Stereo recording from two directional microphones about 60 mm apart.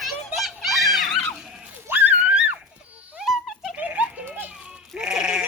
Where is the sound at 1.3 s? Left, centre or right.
Centre.